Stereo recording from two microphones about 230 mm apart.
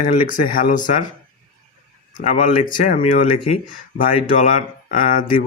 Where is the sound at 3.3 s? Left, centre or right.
Left.